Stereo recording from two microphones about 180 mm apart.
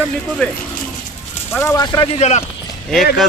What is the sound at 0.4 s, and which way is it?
Speech, 5° left (ahead or behind).